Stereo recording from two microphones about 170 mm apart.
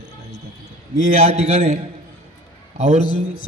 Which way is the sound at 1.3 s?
40° right (ahead or behind).